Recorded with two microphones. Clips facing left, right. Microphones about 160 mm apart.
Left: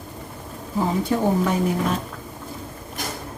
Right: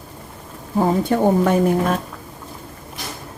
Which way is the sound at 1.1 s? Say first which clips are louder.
Right 4 dB; 55° right (ahead or behind).